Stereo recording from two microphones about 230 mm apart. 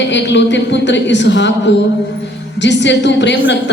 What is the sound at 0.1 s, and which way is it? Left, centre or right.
A woman's voice, left.